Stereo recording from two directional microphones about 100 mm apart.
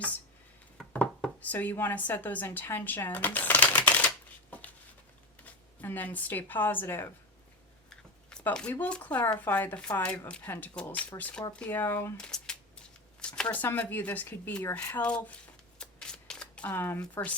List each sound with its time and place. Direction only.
0.8 s a sound: 5° left (ahead or behind)
1.4 s a woman's voice: 15° left (ahead or behind)
5.8 s a woman's voice: 20° left (ahead or behind)
7.9 s a woman's voice: 10° left (ahead or behind)
12.1 s a sound: 5° left (ahead or behind)
13.3 s speech: 5° left (ahead or behind)
13.6 s speech: 20° left (ahead or behind)
15.8 s shuffling cards: 10° left (ahead or behind)